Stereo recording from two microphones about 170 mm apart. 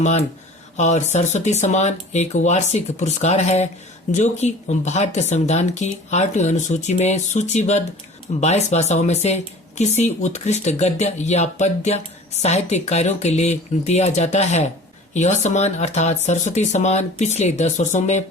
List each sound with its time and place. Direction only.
0.0 s speech: 40° left (ahead or behind)